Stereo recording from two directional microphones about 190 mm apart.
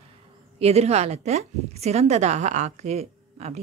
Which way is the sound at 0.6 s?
35° right (ahead or behind).